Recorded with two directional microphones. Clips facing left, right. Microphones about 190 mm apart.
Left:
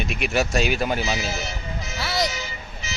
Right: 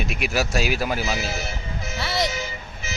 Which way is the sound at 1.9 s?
Centre (ahead or behind).